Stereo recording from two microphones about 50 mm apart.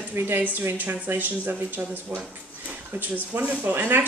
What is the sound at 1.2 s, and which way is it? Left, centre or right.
Speech, right.